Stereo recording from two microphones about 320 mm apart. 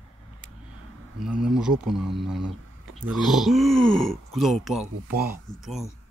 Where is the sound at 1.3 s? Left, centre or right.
Centre.